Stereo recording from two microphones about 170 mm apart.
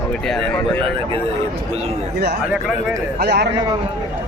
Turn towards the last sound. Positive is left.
turn(degrees=-80)